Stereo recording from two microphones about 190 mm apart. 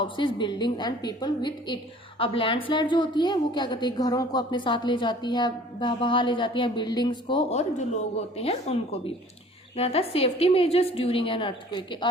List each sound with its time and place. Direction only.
0.0 s a woman's voice: 25° left (ahead or behind)